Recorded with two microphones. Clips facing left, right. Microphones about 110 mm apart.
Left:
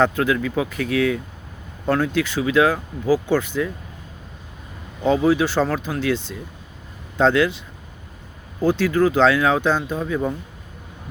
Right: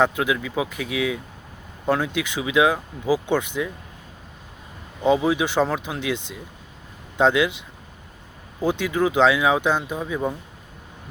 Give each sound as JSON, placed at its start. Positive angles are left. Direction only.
{"t": 0.0, "sound": "speech", "side_deg": -10}
{"t": 5.0, "sound": "speech", "side_deg": -15}
{"t": 8.6, "sound": "speech", "side_deg": -15}